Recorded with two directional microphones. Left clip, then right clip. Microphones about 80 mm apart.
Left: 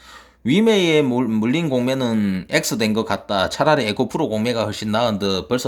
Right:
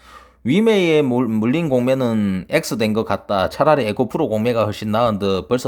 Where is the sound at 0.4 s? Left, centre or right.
Right.